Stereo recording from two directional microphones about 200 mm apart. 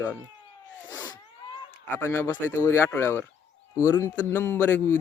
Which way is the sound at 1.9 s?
10° left (ahead or behind).